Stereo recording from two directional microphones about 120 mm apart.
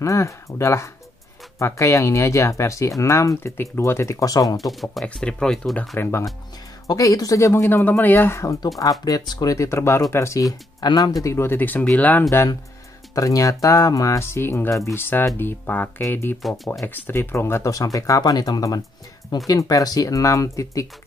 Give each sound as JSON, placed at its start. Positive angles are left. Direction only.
{"t": 0.0, "sound": "speech", "side_deg": 25}
{"t": 4.6, "sound": "speech", "side_deg": 0}
{"t": 5.9, "sound": "speech", "side_deg": 20}
{"t": 11.2, "sound": "speech", "side_deg": 20}
{"t": 16.4, "sound": "speech", "side_deg": 0}
{"t": 16.8, "sound": "speech", "side_deg": 15}